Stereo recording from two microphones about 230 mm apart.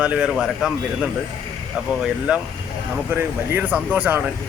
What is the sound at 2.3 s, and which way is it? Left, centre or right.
Speech, centre.